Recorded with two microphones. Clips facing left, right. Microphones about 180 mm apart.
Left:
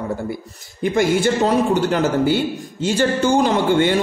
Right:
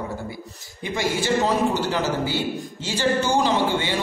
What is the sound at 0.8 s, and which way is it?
A man's voice, 50° left (ahead or behind).